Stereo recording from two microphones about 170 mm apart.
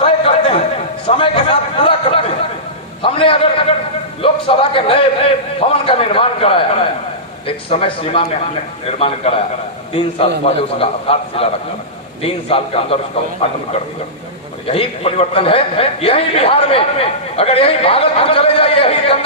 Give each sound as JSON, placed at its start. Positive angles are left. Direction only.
{"t": 0.0, "sound": "a sound", "side_deg": 30}
{"t": 1.0, "sound": "a man's voice", "side_deg": 30}
{"t": 10.4, "sound": "a man's voice", "side_deg": 35}
{"t": 14.7, "sound": "a man's voice", "side_deg": 35}